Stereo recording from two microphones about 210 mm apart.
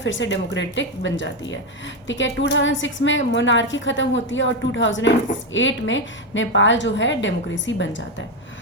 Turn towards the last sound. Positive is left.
turn(degrees=60)  # may be behind; listen again after turning